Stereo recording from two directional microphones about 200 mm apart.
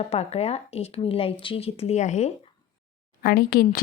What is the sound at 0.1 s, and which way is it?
Speech, 30° left (ahead or behind).